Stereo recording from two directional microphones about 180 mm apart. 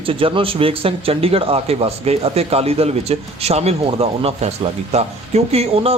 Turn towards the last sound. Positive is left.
turn(degrees=-35)  # may be behind; listen again after turning